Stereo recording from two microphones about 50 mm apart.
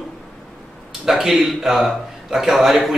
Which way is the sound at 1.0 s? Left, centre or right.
Centre.